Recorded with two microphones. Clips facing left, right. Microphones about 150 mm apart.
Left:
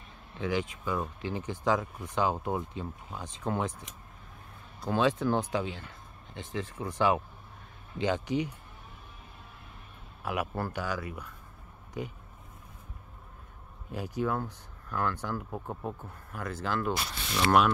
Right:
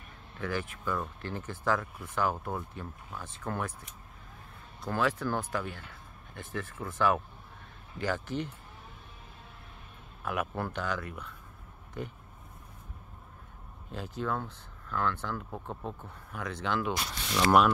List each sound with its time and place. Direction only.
0.4 s speech: 15° left (ahead or behind)
4.8 s speech: 20° left (ahead or behind)
10.2 s speech: 5° left (ahead or behind)
13.9 s speech: 10° left (ahead or behind)
17.5 s mechanisms: centre (ahead or behind)